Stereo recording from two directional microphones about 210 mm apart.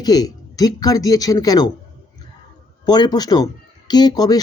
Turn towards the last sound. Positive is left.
turn(degrees=20)  # may be behind; listen again after turning